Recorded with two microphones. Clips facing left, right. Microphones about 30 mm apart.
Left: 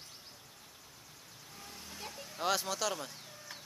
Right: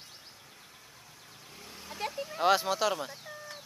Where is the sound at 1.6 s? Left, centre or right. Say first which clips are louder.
Right 4 dB; centre.